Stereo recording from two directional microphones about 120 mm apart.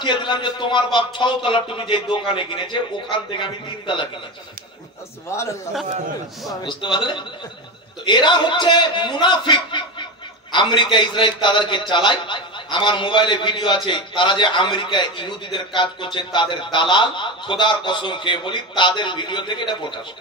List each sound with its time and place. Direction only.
0.0 s a man's voice: 40° left (ahead or behind)
5.3 s a man's voice: 25° left (ahead or behind)
6.6 s a man's voice: 40° left (ahead or behind)